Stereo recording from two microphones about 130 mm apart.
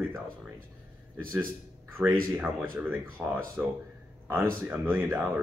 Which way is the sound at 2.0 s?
20° right (ahead or behind).